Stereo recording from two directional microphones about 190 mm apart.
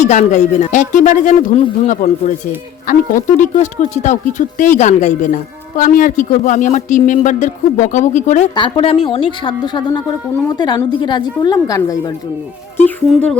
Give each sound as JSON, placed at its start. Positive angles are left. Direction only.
{"t": 0.0, "sound": "speech", "side_deg": 40}
{"t": 8.5, "sound": "a woman's voice", "side_deg": 25}